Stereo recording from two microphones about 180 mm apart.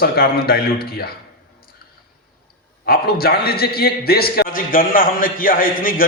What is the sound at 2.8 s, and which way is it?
A man's voice, 55° left (ahead or behind).